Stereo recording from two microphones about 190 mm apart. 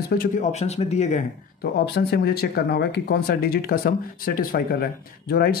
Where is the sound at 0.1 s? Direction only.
50° left (ahead or behind).